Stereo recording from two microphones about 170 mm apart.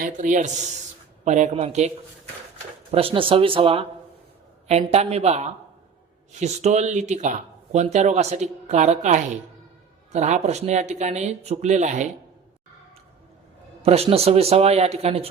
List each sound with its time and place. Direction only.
0.0 s a man's voice: 50° right (ahead or behind)
2.9 s a man's voice: 30° right (ahead or behind)
13.8 s a man's voice: 35° right (ahead or behind)